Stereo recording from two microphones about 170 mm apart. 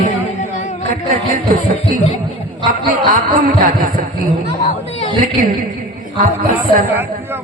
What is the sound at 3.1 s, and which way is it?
Speech, 55° right (ahead or behind).